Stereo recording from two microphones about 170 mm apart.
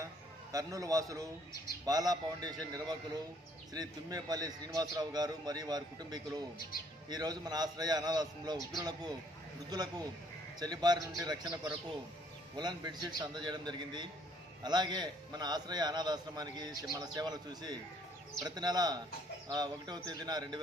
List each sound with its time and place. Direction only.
0.5 s a man's voice: 20° right (ahead or behind)